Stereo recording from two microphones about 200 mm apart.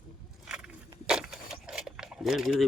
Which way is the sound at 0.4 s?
5° right (ahead or behind).